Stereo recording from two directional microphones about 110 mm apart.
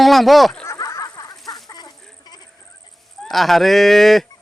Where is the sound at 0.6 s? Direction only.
30° left (ahead or behind).